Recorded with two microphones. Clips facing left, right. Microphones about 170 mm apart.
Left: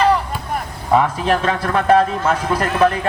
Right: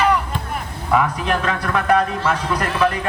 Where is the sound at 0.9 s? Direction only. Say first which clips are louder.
Left 3 dB; 30° left (ahead or behind).